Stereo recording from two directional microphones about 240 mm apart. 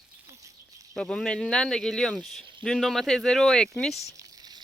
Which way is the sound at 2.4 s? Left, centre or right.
Right.